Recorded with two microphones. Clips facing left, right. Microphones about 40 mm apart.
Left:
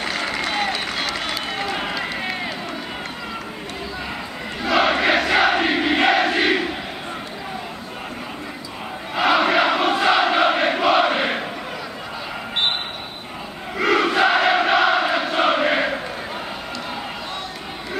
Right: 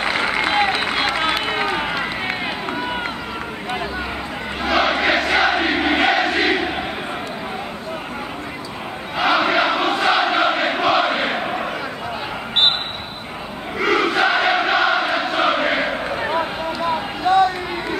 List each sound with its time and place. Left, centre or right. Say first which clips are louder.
0.0 s run: right 5 dB; right
4.6 s crowd: even; centre
9.1 s crowd: even; centre
13.7 s crowd: even; centre